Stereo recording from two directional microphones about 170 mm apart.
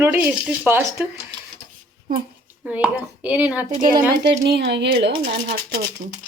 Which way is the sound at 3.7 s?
55° right (ahead or behind).